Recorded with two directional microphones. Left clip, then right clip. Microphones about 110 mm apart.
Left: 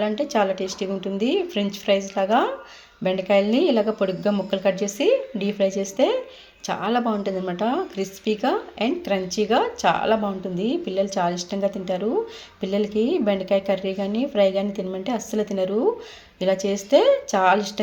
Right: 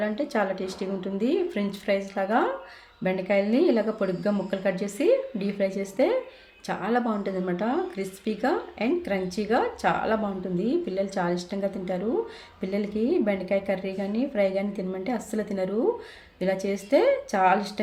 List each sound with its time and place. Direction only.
0.0 s speech: 20° left (ahead or behind)